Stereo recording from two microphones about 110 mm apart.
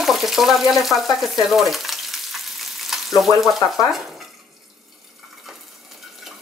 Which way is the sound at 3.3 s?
30° left (ahead or behind).